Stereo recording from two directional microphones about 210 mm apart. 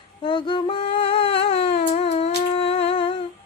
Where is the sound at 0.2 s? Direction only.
25° left (ahead or behind).